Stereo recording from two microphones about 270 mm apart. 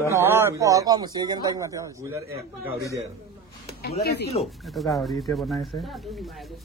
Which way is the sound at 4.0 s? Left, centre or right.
Left.